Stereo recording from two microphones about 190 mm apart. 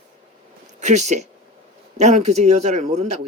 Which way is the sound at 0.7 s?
35° right (ahead or behind).